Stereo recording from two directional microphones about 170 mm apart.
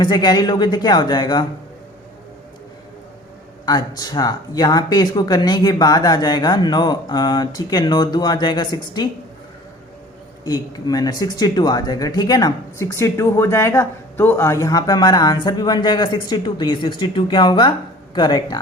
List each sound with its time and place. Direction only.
0.0 s speech: 25° left (ahead or behind)
3.7 s speech: 25° left (ahead or behind)
10.4 s speech: 20° left (ahead or behind)